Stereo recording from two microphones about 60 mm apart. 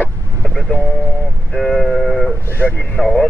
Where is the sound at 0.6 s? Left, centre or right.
Centre.